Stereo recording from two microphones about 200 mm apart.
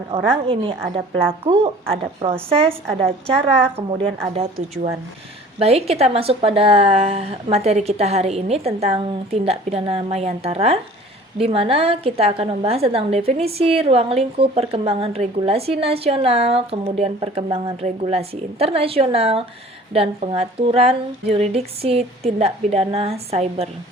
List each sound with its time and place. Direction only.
0.1 s a woman's voice: 25° right (ahead or behind)
3.9 s a woman's voice: 30° right (ahead or behind)